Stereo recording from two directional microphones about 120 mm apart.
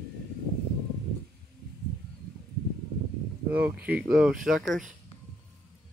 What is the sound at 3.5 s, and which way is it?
Speech, 15° right (ahead or behind).